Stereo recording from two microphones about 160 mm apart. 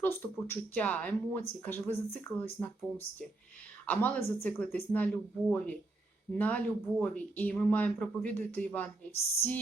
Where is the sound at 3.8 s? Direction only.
10° left (ahead or behind).